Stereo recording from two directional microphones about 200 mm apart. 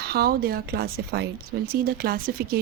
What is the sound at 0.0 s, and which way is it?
Speech, 50° right (ahead or behind).